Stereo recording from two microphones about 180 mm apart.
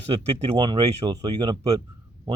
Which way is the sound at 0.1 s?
35° right (ahead or behind).